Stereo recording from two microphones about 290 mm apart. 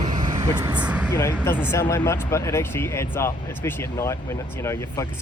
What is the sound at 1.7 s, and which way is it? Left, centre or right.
Speech, centre.